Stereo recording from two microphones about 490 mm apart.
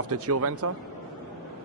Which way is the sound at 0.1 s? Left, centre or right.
Right.